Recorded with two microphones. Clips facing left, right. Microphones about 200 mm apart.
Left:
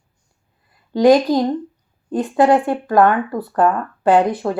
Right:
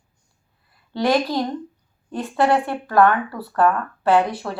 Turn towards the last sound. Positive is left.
turn(degrees=20)  # may be behind; listen again after turning